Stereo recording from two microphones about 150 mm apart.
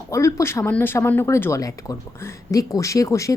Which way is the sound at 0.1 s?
20° left (ahead or behind).